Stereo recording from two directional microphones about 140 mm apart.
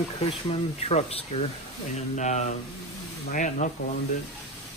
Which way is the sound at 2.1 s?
60° left (ahead or behind).